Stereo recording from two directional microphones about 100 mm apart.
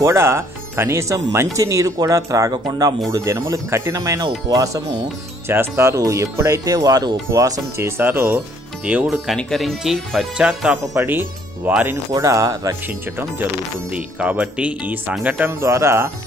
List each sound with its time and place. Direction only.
0.0 s speech: 25° right (ahead or behind); by 9.1 s 10° right (ahead or behind)
9.1 s speech: centre (ahead or behind)
11.1 s speech: 20° right (ahead or behind)
12.1 s speech: 35° right (ahead or behind)
13.9 s speech: 10° right (ahead or behind)
15.6 s speech: 30° right (ahead or behind)